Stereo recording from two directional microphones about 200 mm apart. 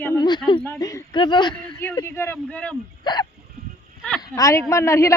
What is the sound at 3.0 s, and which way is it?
Speech, 20° left (ahead or behind).